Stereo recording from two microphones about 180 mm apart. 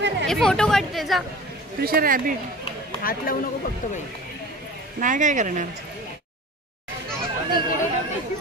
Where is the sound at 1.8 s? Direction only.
55° right (ahead or behind).